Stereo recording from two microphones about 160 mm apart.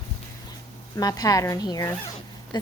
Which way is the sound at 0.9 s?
25° left (ahead or behind).